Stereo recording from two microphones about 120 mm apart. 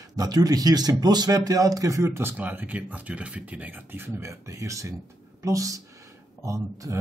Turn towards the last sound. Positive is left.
turn(degrees=-25)  # may be behind; listen again after turning